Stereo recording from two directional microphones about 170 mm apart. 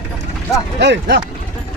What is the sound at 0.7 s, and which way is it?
Speech, 90° right.